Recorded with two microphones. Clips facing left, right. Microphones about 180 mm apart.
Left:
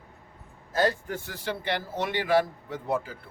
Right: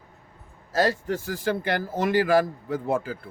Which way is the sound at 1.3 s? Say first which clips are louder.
Right 4 dB; 45° right (ahead or behind).